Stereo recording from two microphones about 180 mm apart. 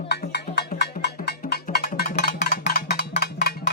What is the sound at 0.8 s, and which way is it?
Cowbell, 65° left (ahead or behind).